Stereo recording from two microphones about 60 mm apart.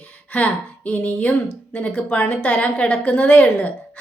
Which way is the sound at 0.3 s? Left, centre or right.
Left.